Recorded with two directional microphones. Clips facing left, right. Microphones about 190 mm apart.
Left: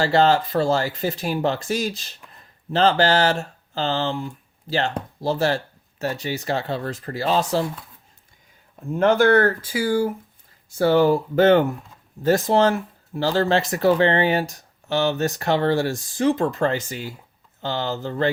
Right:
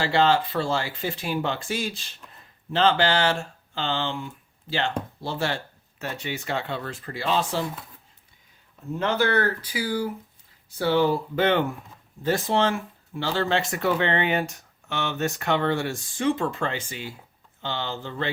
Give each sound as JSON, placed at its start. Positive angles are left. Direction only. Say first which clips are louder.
{"t": 0.0, "sound": "speech", "louder": "left 4 dB", "side_deg": 40}
{"t": 9.0, "sound": "speech", "louder": "left 8 dB", "side_deg": 50}